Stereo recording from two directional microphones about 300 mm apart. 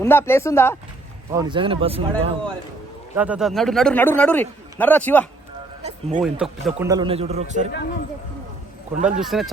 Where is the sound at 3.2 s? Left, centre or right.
Centre.